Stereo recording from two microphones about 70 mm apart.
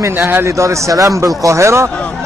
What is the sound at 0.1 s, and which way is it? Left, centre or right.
Speech, right.